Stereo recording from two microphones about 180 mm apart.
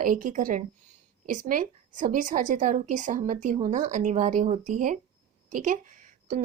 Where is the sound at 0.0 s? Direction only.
45° right (ahead or behind).